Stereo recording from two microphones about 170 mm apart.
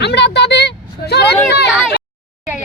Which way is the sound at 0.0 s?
80° left.